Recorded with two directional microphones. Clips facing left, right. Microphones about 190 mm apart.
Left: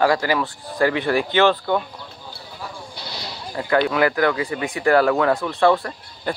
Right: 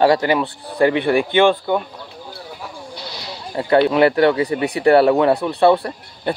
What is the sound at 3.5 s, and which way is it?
Speech, 30° right (ahead or behind).